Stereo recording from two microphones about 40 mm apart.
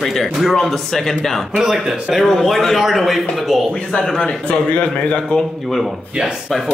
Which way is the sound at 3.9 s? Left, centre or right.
Left.